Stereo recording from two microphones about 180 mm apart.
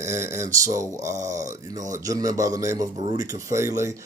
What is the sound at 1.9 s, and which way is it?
A man's voice, 20° right (ahead or behind).